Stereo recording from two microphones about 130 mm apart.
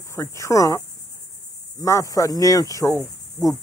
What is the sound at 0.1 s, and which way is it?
Speech, 20° left (ahead or behind).